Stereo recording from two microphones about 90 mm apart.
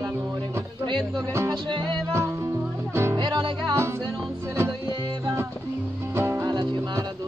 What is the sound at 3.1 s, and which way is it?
Music, 60° right (ahead or behind).